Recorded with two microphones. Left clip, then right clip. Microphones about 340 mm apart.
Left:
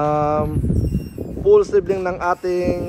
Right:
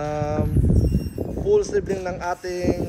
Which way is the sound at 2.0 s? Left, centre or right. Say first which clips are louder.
Left 6 dB; left.